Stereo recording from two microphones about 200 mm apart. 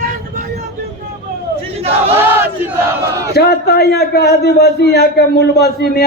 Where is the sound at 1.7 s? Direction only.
30° right (ahead or behind).